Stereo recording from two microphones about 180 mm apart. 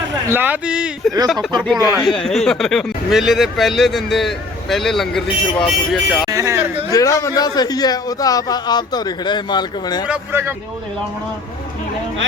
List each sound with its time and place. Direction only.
0.3 s speech: 10° right (ahead or behind)
6.3 s speech: 15° right (ahead or behind)
6.9 s a man's voice: 20° left (ahead or behind)
10.1 s speech: 10° right (ahead or behind)